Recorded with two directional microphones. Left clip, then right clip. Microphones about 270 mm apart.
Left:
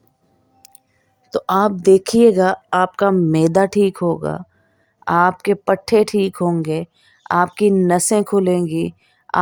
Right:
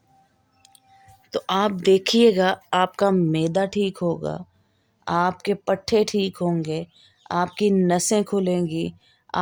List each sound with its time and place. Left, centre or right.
1.5 s speech: left
3.3 s speech: left
9.3 s a sound: centre